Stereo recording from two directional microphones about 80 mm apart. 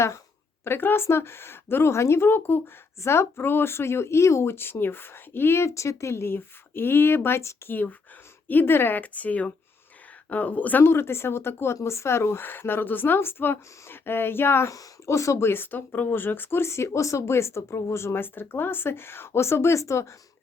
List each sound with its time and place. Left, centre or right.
0.6 s speech: left
14.7 s speech: left